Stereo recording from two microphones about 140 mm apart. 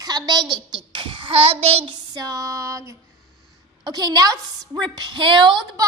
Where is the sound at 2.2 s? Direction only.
25° right (ahead or behind).